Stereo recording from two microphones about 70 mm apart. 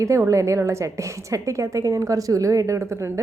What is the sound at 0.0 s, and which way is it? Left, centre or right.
A woman's voice, right.